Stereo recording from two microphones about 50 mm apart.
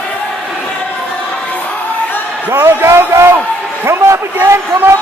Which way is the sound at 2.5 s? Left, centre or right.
Right.